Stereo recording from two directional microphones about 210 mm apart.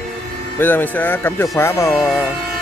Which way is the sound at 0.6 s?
10° left (ahead or behind).